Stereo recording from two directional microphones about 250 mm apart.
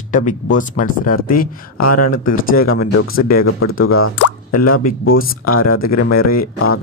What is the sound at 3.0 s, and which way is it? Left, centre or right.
Speech, left.